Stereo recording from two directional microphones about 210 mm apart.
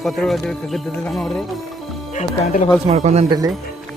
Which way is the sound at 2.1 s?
35° left (ahead or behind).